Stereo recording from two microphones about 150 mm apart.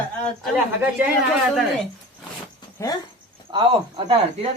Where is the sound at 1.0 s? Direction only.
15° right (ahead or behind).